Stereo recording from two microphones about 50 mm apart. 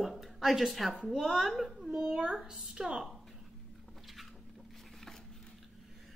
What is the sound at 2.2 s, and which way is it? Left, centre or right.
Speech, centre.